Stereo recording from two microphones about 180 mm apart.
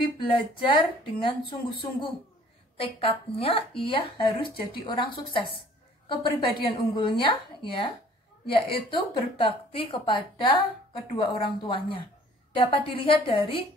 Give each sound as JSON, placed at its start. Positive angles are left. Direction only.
{"t": 0.2, "sound": "a woman's voice", "side_deg": 30}